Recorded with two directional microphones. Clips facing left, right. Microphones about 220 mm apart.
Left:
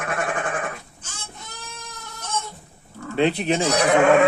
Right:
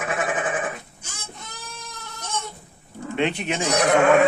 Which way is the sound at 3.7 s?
Centre (ahead or behind).